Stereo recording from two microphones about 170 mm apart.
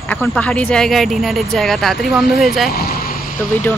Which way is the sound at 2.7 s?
65° left (ahead or behind).